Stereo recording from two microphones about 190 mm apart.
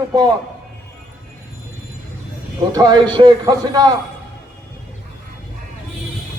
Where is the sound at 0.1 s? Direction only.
20° right (ahead or behind).